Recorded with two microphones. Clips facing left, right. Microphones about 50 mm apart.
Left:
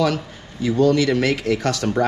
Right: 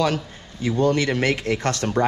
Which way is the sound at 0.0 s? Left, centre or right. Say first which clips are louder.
Left 2 dB; right.